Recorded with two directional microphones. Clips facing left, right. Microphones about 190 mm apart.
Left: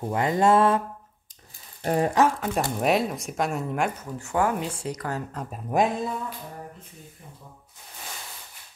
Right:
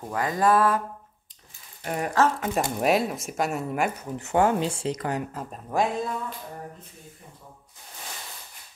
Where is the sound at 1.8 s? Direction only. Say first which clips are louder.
Left 6 dB; 30° left (ahead or behind).